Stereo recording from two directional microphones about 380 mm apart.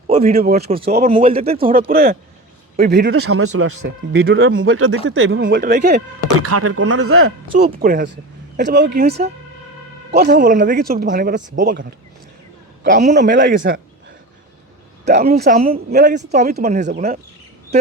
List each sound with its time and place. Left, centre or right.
0.1 s speech: centre
6.4 s speech: right
7.6 s speech: right
15.0 s speech: right